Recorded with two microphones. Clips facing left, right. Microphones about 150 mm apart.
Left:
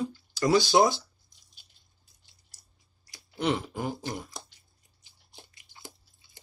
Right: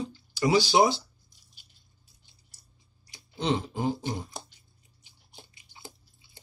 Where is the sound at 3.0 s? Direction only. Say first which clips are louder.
Left 2 dB; 25° right (ahead or behind).